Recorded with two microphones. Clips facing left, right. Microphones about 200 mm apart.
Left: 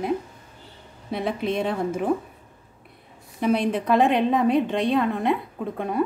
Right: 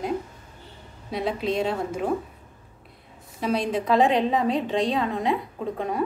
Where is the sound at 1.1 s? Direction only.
55° left (ahead or behind).